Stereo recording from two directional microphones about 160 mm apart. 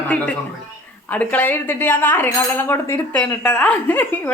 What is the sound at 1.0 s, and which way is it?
A woman's voice, 10° left (ahead or behind).